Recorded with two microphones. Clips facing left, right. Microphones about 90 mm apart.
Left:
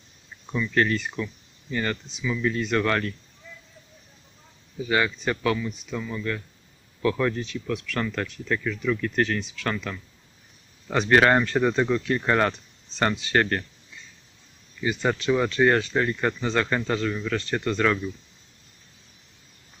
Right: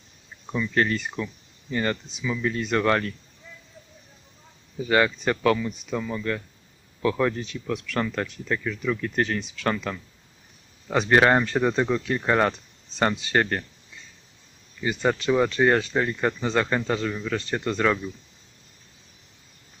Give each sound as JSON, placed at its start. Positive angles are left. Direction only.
{"t": 0.7, "sound": "speech", "side_deg": -25}
{"t": 4.8, "sound": "speech", "side_deg": -40}
{"t": 7.0, "sound": "speech", "side_deg": -25}
{"t": 11.0, "sound": "speech", "side_deg": -25}
{"t": 15.2, "sound": "speech", "side_deg": -25}